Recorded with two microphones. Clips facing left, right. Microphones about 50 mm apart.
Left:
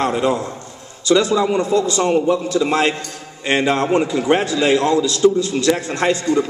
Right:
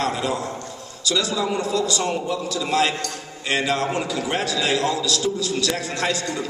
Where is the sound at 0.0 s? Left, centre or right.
Left.